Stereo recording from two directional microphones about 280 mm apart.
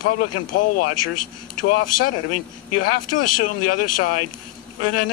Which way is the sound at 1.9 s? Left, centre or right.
Left.